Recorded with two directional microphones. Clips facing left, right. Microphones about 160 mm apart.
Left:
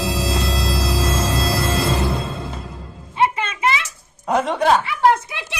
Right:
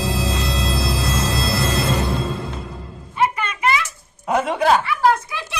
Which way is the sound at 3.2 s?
20° left (ahead or behind).